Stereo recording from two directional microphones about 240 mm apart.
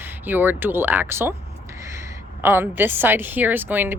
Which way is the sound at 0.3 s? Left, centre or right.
Centre.